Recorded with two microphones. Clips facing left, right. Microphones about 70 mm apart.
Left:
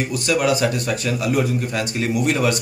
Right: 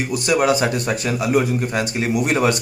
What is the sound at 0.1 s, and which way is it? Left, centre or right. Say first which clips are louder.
Speech: right 3 dB; right.